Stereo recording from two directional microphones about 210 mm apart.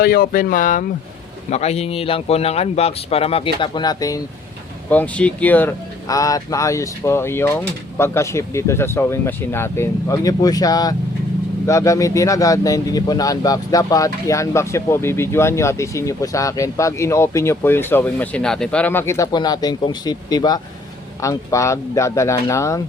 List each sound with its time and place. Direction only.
0.0 s speech: 45° left (ahead or behind); by 4.2 s 20° left (ahead or behind)
4.9 s speech: 5° left (ahead or behind)